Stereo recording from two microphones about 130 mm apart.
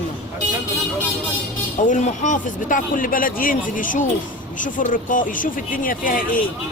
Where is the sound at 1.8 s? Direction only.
80° left.